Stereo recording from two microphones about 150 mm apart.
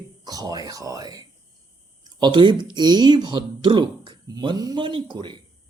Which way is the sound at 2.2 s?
30° right (ahead or behind).